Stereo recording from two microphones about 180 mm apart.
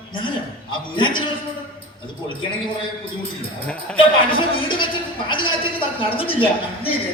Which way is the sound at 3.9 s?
30° left (ahead or behind).